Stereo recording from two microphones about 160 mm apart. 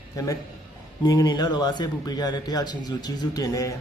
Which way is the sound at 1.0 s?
25° left (ahead or behind).